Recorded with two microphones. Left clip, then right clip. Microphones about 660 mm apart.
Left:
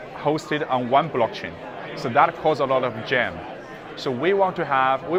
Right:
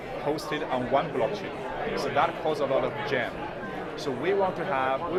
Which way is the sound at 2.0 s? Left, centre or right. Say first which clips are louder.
Left 8 dB; left.